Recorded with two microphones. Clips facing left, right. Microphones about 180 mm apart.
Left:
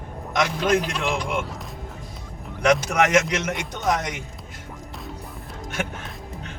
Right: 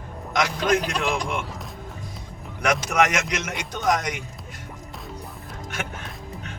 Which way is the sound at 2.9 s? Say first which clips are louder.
Left 2 dB; 25° left (ahead or behind).